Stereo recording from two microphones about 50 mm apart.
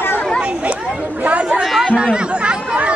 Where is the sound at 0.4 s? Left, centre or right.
Right.